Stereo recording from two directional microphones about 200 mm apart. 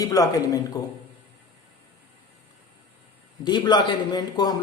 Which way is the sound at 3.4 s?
20° left (ahead or behind).